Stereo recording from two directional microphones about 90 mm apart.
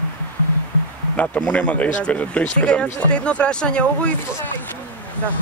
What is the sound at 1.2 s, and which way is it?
Speech, 15° left (ahead or behind).